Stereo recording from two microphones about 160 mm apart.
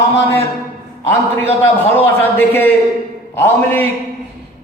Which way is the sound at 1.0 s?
15° left (ahead or behind).